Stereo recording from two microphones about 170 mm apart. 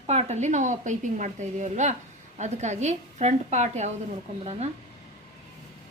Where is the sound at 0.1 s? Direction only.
40° right (ahead or behind).